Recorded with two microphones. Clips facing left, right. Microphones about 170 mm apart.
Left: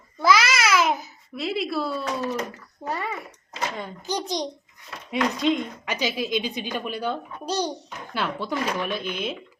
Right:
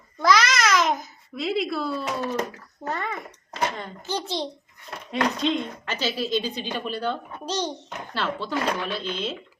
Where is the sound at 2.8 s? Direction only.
10° left (ahead or behind).